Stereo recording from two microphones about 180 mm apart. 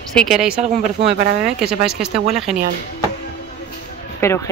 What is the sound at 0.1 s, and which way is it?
Speech, centre (ahead or behind).